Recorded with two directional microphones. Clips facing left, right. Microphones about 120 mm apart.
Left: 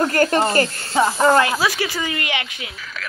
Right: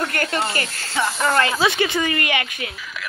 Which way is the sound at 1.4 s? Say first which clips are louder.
Right 1 dB; 5° left (ahead or behind).